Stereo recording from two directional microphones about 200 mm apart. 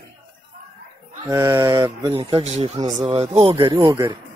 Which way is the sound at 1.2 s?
15° right (ahead or behind).